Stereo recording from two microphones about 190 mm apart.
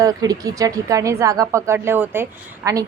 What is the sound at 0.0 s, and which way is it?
A woman's voice, 20° right (ahead or behind).